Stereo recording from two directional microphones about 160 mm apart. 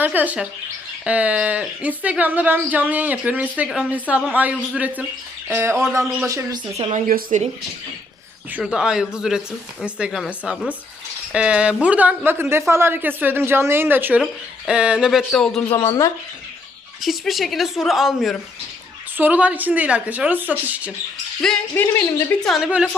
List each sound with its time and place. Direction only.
0.0 s speech: 10° right (ahead or behind)
7.1 s speech: 55° right (ahead or behind)
8.5 s a woman's voice: 5° right (ahead or behind)
15.9 s speech: 20° left (ahead or behind)
17.0 s a woman's voice: centre (ahead or behind)
21.4 s a woman's voice: 10° left (ahead or behind)
22.4 s a woman's voice: centre (ahead or behind)